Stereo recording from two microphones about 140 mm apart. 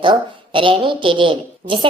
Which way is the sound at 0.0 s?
35° right (ahead or behind).